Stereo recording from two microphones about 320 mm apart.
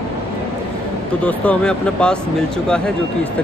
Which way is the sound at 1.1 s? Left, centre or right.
Centre.